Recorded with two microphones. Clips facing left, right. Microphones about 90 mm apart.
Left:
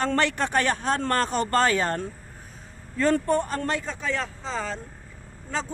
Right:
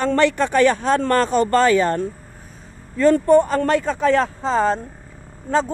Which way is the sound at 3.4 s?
80° right.